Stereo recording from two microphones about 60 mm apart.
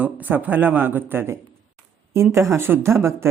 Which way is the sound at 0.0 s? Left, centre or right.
Right.